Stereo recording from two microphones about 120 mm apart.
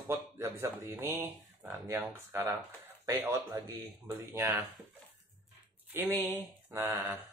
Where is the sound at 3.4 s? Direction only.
30° right (ahead or behind).